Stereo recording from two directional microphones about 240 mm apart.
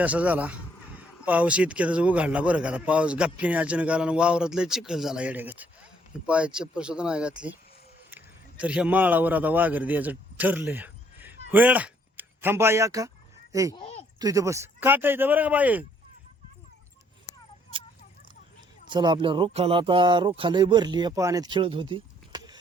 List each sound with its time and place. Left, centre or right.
0.0 s a man's voice: centre
13.7 s speech: left
14.2 s speech: centre
18.9 s speech: centre